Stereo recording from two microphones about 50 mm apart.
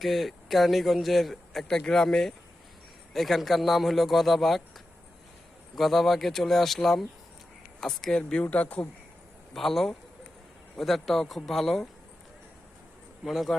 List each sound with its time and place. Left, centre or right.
0.0 s a man's voice: centre
5.7 s a man's voice: centre
8.4 s speech: left
9.5 s a man's voice: centre
13.2 s a man's voice: centre